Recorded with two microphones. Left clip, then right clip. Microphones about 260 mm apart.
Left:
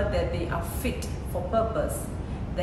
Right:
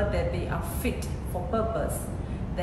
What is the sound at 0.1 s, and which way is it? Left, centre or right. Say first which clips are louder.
A woman's voice: left 2 dB; centre.